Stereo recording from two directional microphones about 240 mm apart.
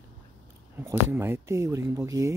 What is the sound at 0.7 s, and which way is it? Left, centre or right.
Speech, centre.